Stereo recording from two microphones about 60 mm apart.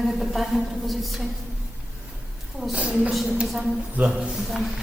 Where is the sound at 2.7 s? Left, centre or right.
Centre.